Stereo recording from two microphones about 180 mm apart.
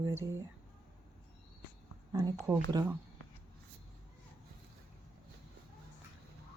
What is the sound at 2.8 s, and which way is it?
Speech, 20° right (ahead or behind).